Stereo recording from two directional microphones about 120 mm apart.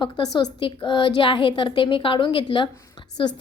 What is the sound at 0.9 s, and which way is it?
A woman's voice, 45° left (ahead or behind).